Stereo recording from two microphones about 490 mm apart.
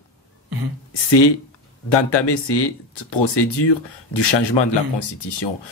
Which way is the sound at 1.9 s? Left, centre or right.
Left.